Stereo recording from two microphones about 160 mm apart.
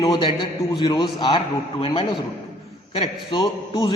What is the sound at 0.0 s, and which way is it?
A man's voice, 30° left (ahead or behind).